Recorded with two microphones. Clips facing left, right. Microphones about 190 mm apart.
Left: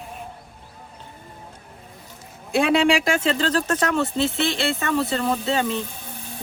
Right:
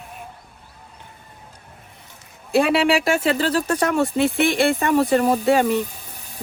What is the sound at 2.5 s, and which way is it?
Speech, 5° right (ahead or behind).